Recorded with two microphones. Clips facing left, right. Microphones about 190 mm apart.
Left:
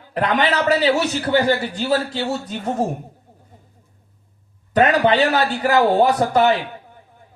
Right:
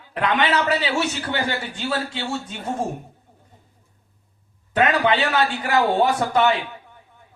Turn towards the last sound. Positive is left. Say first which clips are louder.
# left 3 dB
turn(degrees=35)  # may be behind; listen again after turning